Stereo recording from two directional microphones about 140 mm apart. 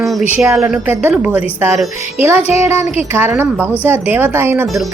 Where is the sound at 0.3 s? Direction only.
15° right (ahead or behind).